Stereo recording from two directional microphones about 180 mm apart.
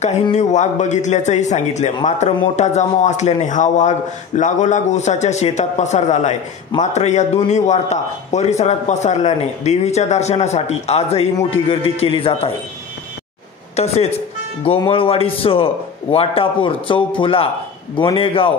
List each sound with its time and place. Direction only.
0.0 s a man's voice: 40° left (ahead or behind)
13.7 s a man's voice: 35° left (ahead or behind)